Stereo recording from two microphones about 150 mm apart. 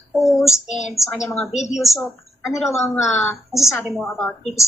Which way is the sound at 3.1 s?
Centre (ahead or behind).